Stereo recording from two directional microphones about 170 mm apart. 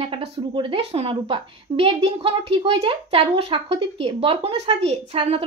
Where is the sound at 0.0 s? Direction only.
35° right (ahead or behind).